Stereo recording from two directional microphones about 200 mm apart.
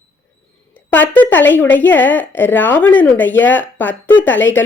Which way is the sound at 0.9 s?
10° left (ahead or behind).